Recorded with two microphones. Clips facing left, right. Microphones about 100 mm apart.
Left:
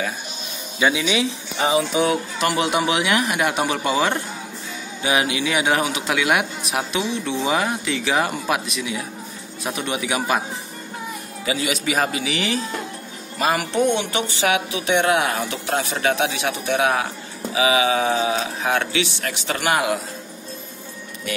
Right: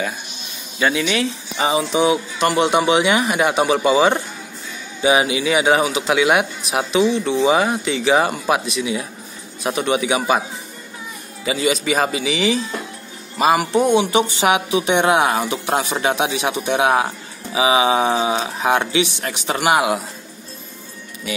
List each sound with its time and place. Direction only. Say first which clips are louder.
0.7 s speech: right 1 dB; 10° left (ahead or behind)
11.4 s speech: right 4 dB; centre (ahead or behind)
13.9 s a woman's voice: right 7 dB; 15° right (ahead or behind)